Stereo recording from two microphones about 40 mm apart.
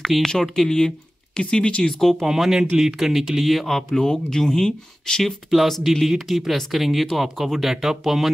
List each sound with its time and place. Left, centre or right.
0.0 s speech: centre; by 1.9 s left
1.9 s speech: centre
2.2 s speech: centre
5.2 s speech: centre
7.7 s speech: centre